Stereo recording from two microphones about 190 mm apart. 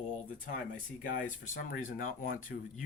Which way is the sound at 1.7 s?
45° left (ahead or behind).